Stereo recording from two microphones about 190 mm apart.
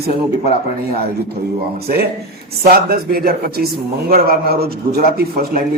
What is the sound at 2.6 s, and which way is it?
Speech, 55° right (ahead or behind).